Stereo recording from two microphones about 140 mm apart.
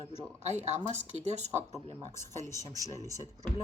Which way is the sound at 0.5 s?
55° right (ahead or behind).